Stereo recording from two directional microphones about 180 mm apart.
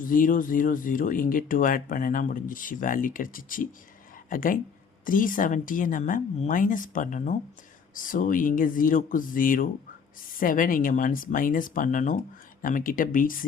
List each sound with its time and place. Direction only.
0.0 s speech: 50° left (ahead or behind)